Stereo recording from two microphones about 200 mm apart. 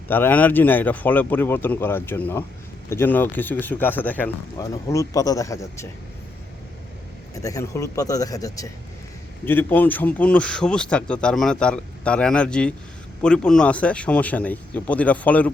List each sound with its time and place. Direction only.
0.1 s speech: 10° left (ahead or behind)
7.3 s a man's voice: 15° left (ahead or behind)